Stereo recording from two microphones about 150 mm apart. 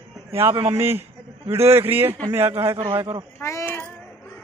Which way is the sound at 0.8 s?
15° right (ahead or behind).